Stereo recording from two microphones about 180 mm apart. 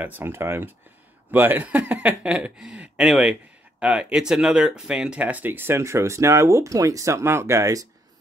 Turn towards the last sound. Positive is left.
turn(degrees=-15)  # may be behind; listen again after turning